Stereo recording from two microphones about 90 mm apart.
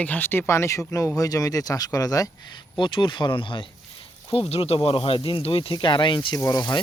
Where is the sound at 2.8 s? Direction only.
65° left (ahead or behind).